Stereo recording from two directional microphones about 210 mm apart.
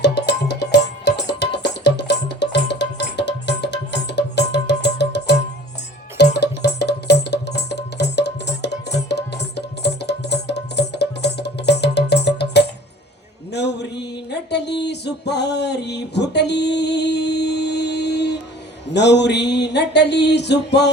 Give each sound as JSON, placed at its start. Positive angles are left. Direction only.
{"t": 0.0, "sound": "music", "side_deg": 55}
{"t": 13.5, "sound": "a sound", "side_deg": 55}
{"t": 18.9, "sound": "music", "side_deg": 55}